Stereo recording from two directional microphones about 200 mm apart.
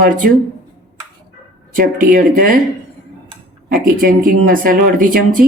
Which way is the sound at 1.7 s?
45° right (ahead or behind).